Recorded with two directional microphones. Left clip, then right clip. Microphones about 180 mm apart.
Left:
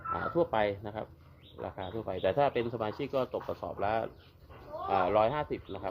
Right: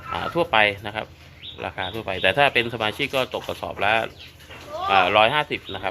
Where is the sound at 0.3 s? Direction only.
15° left (ahead or behind).